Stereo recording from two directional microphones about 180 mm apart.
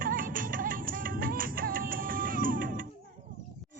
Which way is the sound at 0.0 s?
50° right (ahead or behind).